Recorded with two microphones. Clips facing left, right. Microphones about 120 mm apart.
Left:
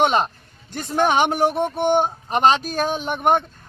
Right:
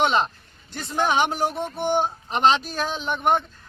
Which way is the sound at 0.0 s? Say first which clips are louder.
Left 3 dB; 45° left (ahead or behind).